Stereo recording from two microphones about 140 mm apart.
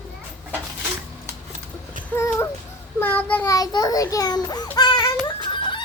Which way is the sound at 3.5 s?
25° left (ahead or behind).